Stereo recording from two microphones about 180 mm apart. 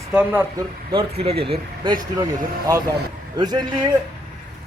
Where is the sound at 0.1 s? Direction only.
5° right (ahead or behind).